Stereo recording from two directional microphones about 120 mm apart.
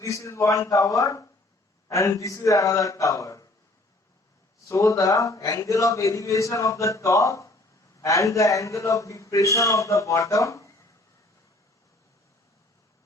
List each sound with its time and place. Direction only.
0.0 s a man's voice: 25° left (ahead or behind)
4.7 s a man's voice: 25° left (ahead or behind)